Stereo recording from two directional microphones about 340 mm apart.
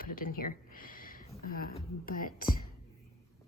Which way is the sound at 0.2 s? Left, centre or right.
Left.